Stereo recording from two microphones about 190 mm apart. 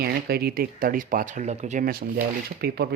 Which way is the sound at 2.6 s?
55° right (ahead or behind).